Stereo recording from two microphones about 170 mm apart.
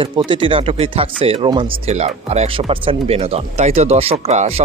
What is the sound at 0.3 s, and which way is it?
Speech, 30° right (ahead or behind).